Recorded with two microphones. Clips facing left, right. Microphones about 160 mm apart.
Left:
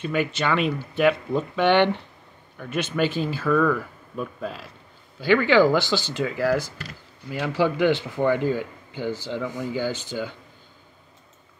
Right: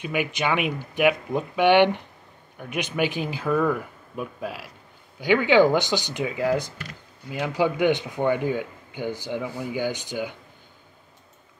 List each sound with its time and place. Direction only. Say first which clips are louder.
0.0 s speech: left 1 dB; 15° right (ahead or behind)